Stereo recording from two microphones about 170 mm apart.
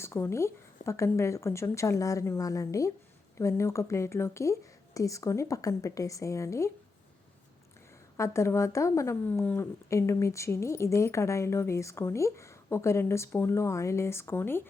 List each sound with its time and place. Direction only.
0.0 s a woman's voice: 15° left (ahead or behind)
8.1 s speech: 15° left (ahead or behind)